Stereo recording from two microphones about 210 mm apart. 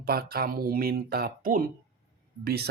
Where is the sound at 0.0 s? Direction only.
45° right (ahead or behind).